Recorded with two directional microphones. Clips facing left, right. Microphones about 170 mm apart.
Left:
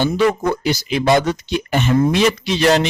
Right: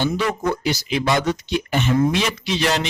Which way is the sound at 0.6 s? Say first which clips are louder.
Left 4 dB; 50° left (ahead or behind).